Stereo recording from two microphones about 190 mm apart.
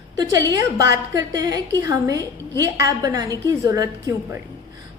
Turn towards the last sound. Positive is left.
turn(degrees=-15)  # may be behind; listen again after turning